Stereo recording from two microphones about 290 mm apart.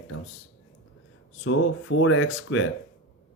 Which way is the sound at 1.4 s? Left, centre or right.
Left.